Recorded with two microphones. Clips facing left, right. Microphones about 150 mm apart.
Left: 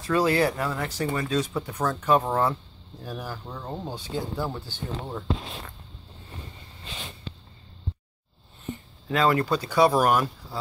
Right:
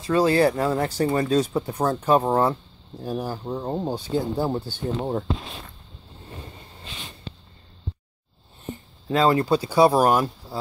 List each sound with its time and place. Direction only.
0.0 s speech: 30° right (ahead or behind); by 5.2 s 45° right (ahead or behind)
9.1 s speech: 25° right (ahead or behind)